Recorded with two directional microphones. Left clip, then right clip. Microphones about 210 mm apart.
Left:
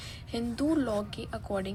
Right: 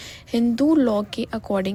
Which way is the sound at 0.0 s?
40° right (ahead or behind).